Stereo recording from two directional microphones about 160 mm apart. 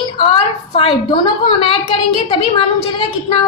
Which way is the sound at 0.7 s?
30° left (ahead or behind).